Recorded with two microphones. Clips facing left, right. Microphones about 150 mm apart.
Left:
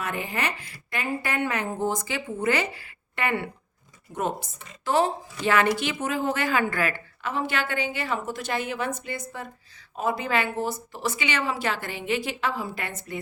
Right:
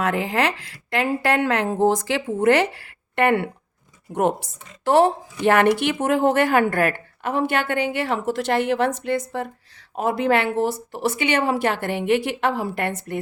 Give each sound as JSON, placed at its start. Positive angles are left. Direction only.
{"t": 0.0, "sound": "a woman's voice", "side_deg": -90}